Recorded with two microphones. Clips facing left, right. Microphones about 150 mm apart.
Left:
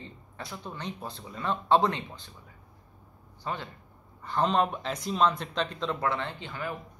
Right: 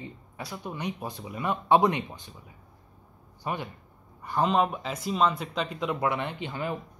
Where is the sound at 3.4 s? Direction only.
15° right (ahead or behind).